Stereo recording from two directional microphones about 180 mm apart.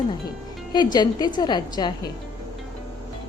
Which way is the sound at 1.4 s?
25° left (ahead or behind).